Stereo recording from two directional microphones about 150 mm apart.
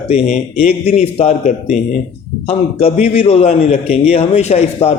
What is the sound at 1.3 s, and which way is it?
Speech, 55° left (ahead or behind).